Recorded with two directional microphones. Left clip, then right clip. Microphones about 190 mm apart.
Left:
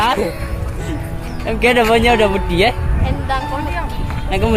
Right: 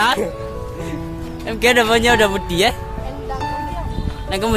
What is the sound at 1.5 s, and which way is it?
Speech, 10° right (ahead or behind).